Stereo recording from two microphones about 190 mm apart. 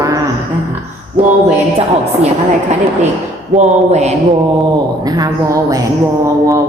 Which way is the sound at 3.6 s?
35° right (ahead or behind).